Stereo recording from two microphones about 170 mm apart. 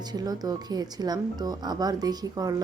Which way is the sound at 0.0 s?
25° right (ahead or behind).